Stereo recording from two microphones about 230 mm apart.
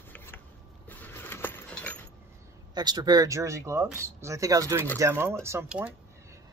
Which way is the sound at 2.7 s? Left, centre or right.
Centre.